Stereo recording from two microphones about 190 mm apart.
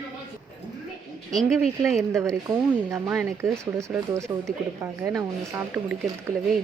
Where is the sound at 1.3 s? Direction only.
Centre (ahead or behind).